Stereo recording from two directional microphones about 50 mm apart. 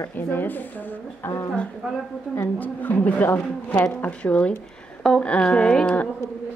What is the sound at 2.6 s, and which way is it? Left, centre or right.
A woman's voice, left.